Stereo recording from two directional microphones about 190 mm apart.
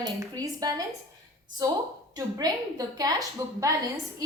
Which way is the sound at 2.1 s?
20° right (ahead or behind).